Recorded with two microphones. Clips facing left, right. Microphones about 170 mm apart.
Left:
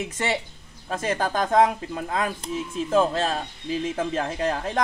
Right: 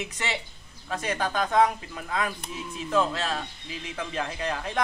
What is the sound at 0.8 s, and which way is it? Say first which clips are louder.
A man's voice: left 3 dB; 45° left (ahead or behind).